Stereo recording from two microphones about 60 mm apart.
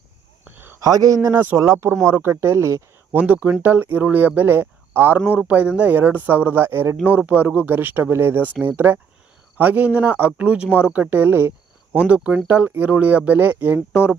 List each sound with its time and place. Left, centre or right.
0.8 s speech: right
1.3 s speech: right
1.5 s speech: right
2.0 s speech: right
3.1 s speech: right
5.5 s speech: right
11.9 s speech: right
13.7 s speech: centre